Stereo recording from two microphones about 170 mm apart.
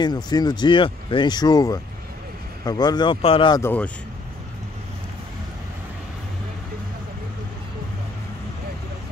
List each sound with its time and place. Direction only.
0.0 s speech: 25° left (ahead or behind)
3.6 s speech: 10° left (ahead or behind)